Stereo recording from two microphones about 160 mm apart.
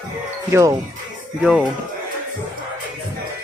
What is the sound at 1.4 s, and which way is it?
Speech, 5° right (ahead or behind).